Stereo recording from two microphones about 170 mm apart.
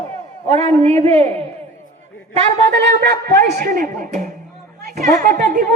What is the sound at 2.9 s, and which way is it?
Speech, 55° right (ahead or behind).